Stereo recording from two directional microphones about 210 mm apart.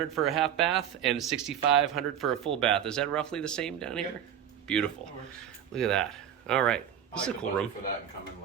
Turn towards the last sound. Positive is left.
turn(degrees=5)  # may be behind; listen again after turning